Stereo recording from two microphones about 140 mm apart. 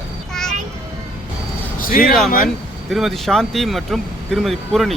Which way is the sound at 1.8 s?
90° left.